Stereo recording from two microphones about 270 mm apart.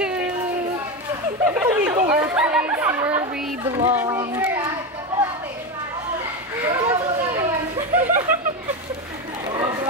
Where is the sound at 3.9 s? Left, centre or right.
Centre.